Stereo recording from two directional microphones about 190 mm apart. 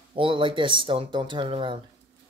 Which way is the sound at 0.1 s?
25° right (ahead or behind).